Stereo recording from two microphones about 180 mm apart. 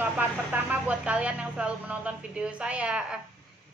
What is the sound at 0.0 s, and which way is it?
Speech, 10° right (ahead or behind).